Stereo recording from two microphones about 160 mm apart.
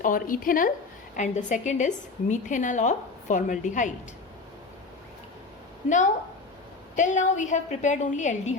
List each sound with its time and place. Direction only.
0.0 s speech: 60° left (ahead or behind)
1.1 s a woman's voice: 50° left (ahead or behind)
6.9 s a woman's voice: 50° left (ahead or behind)